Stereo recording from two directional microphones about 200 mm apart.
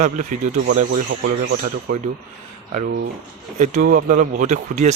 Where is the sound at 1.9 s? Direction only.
40° right (ahead or behind).